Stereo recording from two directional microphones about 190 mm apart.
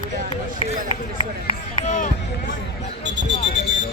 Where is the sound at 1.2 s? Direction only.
35° left (ahead or behind).